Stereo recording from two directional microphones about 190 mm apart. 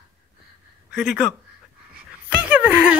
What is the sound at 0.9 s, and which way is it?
Speech, centre (ahead or behind).